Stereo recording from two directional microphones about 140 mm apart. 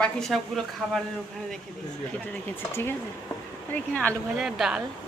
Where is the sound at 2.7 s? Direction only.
15° left (ahead or behind).